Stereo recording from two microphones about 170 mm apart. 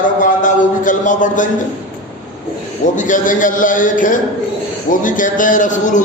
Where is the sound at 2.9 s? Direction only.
50° left (ahead or behind).